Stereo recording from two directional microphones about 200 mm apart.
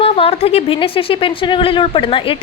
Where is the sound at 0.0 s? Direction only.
30° left (ahead or behind).